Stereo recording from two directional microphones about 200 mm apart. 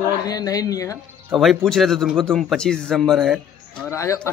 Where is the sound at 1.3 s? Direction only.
Centre (ahead or behind).